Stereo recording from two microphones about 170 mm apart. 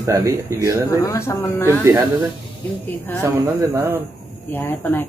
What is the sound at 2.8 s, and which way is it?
Speech, 10° left (ahead or behind).